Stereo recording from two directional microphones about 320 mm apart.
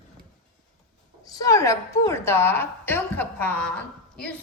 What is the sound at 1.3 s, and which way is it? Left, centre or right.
A woman's voice, centre.